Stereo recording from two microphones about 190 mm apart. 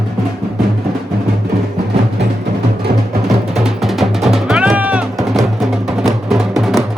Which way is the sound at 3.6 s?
Centre (ahead or behind).